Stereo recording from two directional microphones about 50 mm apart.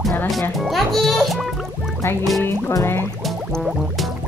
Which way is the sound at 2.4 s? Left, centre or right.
Left.